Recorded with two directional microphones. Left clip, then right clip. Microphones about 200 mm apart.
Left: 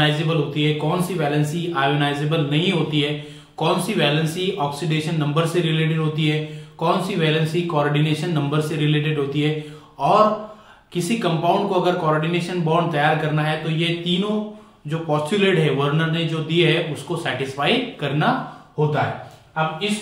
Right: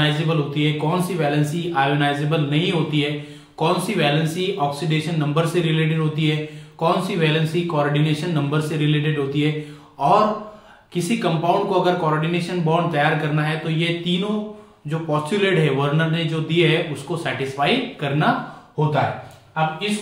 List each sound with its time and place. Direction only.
0.0 s a man's voice: centre (ahead or behind)
18.8 s speech: 10° right (ahead or behind)